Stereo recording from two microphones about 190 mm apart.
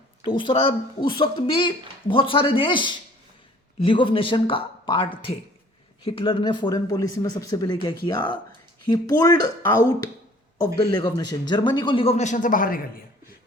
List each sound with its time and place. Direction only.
0.3 s speech: 25° left (ahead or behind); by 12.8 s 45° left (ahead or behind)